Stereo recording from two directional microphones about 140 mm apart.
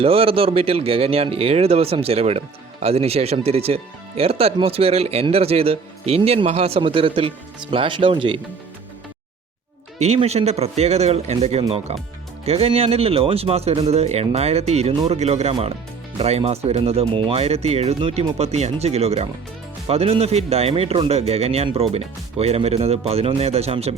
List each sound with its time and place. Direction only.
0.0 s speech: 40° right (ahead or behind)
10.0 s speech: 50° right (ahead or behind)